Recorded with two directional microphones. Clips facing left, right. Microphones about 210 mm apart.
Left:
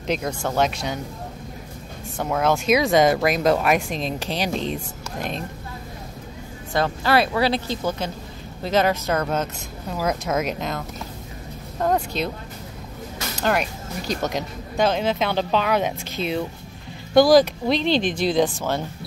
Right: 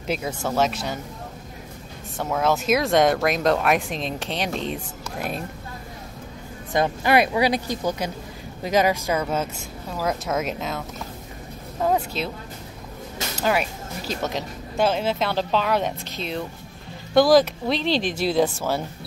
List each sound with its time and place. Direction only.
0.0 s speech: 5° right (ahead or behind)
2.1 s speech: centre (ahead or behind)
6.7 s speech: 20° right (ahead or behind); by 10.8 s centre (ahead or behind)
11.8 s speech: 5° right (ahead or behind)
13.4 s speech: 5° right (ahead or behind)